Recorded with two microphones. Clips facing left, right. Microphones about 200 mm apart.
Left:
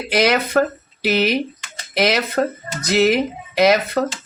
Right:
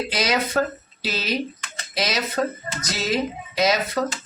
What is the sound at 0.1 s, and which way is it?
Speech, 60° left (ahead or behind).